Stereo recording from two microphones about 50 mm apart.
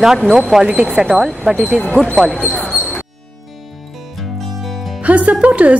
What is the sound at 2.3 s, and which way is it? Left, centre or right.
Speech, centre.